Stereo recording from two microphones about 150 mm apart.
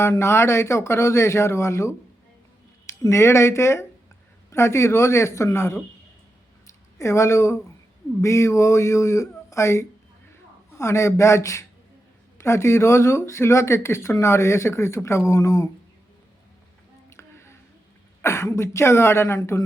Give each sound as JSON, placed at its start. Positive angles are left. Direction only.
{"t": 0.0, "sound": "speech", "side_deg": 15}
{"t": 7.0, "sound": "speech", "side_deg": 20}
{"t": 17.1, "sound": "a sound", "side_deg": 15}
{"t": 18.2, "sound": "speech", "side_deg": 20}